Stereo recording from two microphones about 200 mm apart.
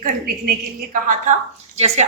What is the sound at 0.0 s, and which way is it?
A woman's voice, 50° right (ahead or behind).